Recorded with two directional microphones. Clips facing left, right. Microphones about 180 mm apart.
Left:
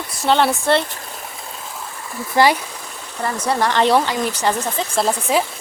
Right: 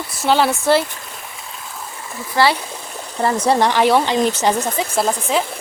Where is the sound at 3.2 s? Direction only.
35° right (ahead or behind).